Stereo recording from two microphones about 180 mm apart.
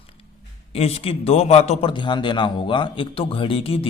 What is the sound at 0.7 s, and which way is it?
A man's voice, 35° left (ahead or behind).